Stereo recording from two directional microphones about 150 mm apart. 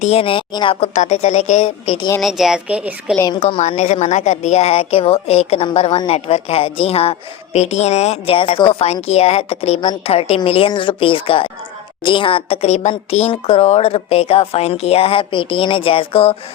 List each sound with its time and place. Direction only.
0.0 s a woman's voice: 45° left (ahead or behind)
0.9 s speech: 50° left (ahead or behind)
2.2 s speech: centre (ahead or behind)
3.4 s a woman's voice: 45° left (ahead or behind)